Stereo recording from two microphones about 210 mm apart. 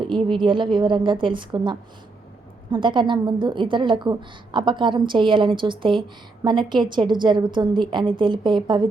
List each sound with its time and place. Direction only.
0.0 s a woman's voice: 25° right (ahead or behind)